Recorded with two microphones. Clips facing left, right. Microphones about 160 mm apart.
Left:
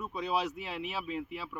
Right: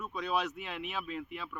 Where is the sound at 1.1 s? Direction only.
5° left (ahead or behind).